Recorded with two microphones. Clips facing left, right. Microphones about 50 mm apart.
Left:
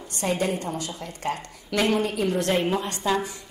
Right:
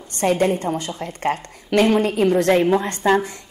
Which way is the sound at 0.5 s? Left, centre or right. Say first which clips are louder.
Right 6 dB; right.